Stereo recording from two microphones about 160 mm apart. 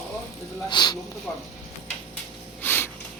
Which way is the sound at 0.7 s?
25° left (ahead or behind).